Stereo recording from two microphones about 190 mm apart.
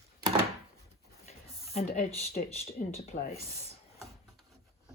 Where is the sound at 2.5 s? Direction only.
35° left (ahead or behind).